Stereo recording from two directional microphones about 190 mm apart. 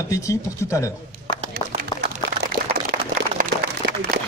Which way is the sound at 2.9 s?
45° right (ahead or behind).